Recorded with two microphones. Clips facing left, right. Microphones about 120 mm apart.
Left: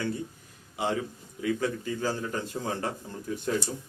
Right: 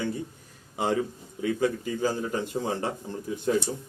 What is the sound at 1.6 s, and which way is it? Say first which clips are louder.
A man's voice: right 3 dB; 15° right (ahead or behind).